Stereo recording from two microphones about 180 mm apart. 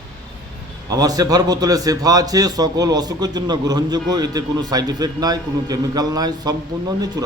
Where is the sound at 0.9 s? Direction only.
20° right (ahead or behind).